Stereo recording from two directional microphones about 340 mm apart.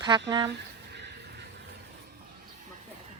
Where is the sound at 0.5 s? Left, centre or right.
Right.